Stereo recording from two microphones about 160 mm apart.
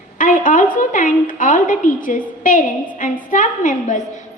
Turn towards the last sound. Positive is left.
turn(degrees=50)  # may be behind; listen again after turning